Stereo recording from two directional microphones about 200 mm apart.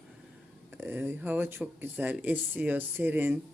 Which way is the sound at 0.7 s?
10° right (ahead or behind).